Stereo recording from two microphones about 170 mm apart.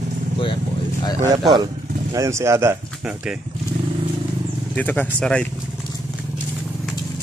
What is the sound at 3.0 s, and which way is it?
Speech, 5° right (ahead or behind).